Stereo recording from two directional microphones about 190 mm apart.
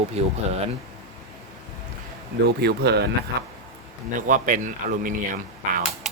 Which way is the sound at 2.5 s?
60° right (ahead or behind).